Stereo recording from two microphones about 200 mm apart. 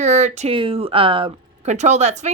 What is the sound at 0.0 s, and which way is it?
Speech, 35° right (ahead or behind).